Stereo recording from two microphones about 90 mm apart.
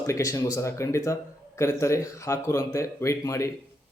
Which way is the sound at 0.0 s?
40° left (ahead or behind).